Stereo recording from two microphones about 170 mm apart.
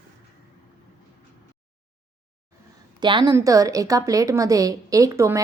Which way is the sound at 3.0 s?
25° right (ahead or behind).